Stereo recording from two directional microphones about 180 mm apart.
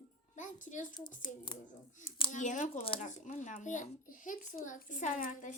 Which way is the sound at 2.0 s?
45° left (ahead or behind).